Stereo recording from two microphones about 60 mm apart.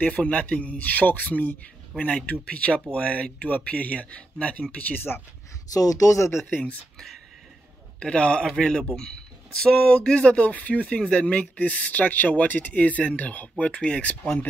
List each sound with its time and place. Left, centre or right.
0.0 s speech: centre
5.7 s speech: left
8.0 s a man's voice: centre